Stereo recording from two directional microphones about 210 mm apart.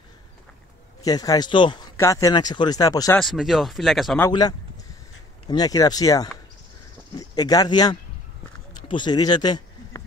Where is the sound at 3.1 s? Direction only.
Centre (ahead or behind).